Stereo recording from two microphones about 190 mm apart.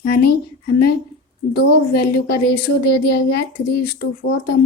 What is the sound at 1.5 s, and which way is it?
A woman's voice, 55° left (ahead or behind).